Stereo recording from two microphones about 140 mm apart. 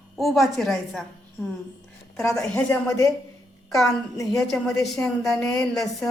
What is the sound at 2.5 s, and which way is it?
Speech, 20° left (ahead or behind).